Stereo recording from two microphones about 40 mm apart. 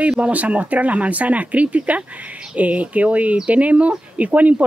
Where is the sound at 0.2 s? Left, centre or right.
Right.